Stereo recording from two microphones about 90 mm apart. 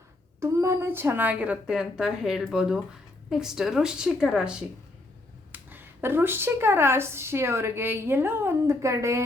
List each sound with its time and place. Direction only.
0.3 s a woman's voice: 30° right (ahead or behind); by 4.5 s 10° right (ahead or behind)
5.5 s speech: 25° right (ahead or behind)